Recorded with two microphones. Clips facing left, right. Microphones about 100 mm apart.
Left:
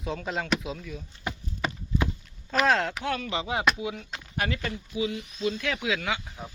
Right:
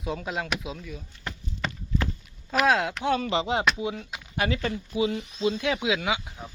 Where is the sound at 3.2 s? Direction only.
30° right (ahead or behind).